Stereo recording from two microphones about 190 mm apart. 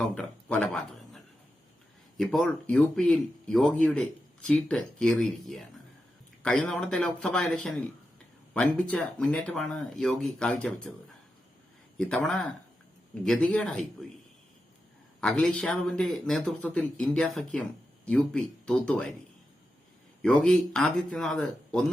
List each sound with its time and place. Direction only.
0.1 s speech: 5° left (ahead or behind)
11.9 s speech: 5° left (ahead or behind)
15.2 s speech: 5° left (ahead or behind)
20.2 s speech: 5° left (ahead or behind)